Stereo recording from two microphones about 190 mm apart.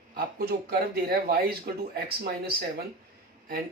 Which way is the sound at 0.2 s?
55° right (ahead or behind).